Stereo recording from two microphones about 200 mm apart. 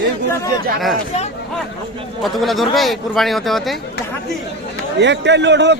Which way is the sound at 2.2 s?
Centre (ahead or behind).